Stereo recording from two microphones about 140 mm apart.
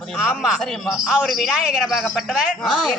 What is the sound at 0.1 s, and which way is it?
A man's voice, 5° right (ahead or behind).